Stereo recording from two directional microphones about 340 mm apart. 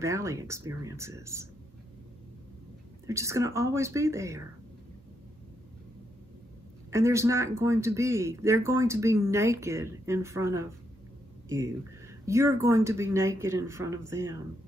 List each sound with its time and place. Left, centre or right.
0.0 s speech: centre
3.1 s speech: centre
6.9 s speech: centre